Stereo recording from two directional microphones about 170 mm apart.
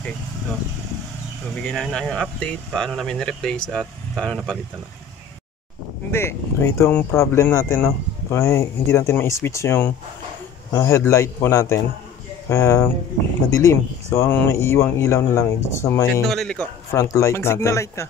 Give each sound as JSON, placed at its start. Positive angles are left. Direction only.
{"t": 1.6, "sound": "speech", "side_deg": 5}
{"t": 6.1, "sound": "speech", "side_deg": 15}
{"t": 16.3, "sound": "speech", "side_deg": 5}
{"t": 16.9, "sound": "speech", "side_deg": 20}